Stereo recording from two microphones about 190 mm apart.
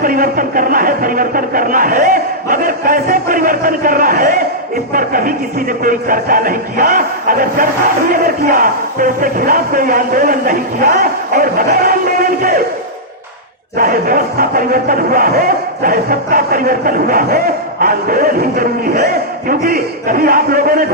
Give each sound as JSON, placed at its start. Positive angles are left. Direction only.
{"t": 0.0, "sound": "speech", "side_deg": -45}
{"t": 13.7, "sound": "speech", "side_deg": -50}